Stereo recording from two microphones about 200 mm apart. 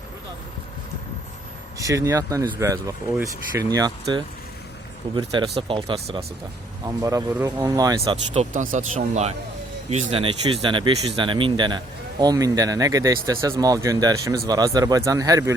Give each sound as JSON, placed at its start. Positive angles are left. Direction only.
{"t": 1.8, "sound": "speech", "side_deg": -15}
{"t": 3.7, "sound": "speech", "side_deg": -20}
{"t": 8.0, "sound": "speech", "side_deg": -30}